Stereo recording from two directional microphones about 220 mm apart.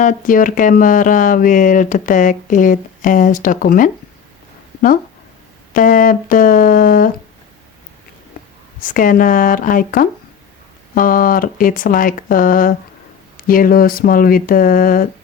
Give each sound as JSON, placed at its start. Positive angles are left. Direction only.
{"t": 0.0, "sound": "speech", "side_deg": 35}
{"t": 5.7, "sound": "speech", "side_deg": 40}
{"t": 8.8, "sound": "speech", "side_deg": 35}